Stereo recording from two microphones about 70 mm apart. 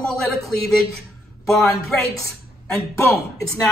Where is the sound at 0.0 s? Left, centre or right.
Centre.